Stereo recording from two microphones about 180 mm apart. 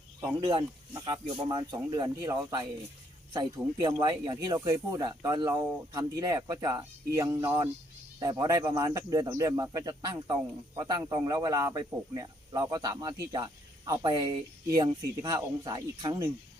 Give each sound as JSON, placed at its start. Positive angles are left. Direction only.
{"t": 0.2, "sound": "speech", "side_deg": -25}